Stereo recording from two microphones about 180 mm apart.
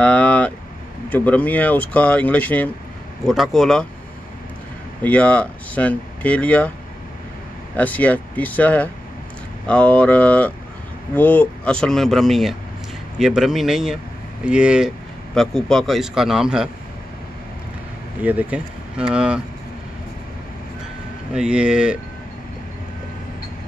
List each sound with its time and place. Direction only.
0.0 s vehicle: 5° left (ahead or behind)
1.1 s speech: 10° left (ahead or behind)
5.0 s speech: 5° left (ahead or behind)
7.7 s speech: 10° left (ahead or behind)
18.2 s speech: 10° right (ahead or behind)
21.3 s speech: 5° right (ahead or behind)